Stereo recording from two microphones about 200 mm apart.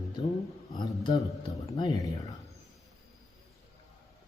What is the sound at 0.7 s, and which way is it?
A man's voice, 25° left (ahead or behind).